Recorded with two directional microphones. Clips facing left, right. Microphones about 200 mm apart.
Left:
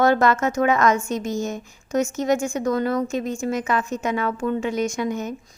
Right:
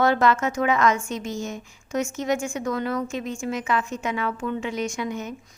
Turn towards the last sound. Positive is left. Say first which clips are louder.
# left 4 dB
turn(degrees=40)  # may be behind; listen again after turning